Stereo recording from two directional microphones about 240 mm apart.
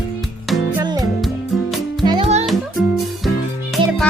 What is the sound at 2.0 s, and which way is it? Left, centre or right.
Music, centre.